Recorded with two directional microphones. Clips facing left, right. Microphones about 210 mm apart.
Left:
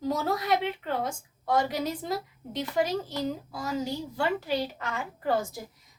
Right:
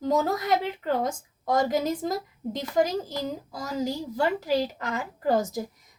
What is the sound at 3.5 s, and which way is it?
A woman's voice, 40° right (ahead or behind).